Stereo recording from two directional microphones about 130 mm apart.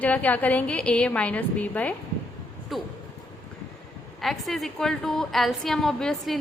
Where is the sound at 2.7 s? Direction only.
Centre (ahead or behind).